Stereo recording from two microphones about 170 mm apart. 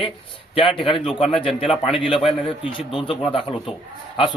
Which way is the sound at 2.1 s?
Centre (ahead or behind).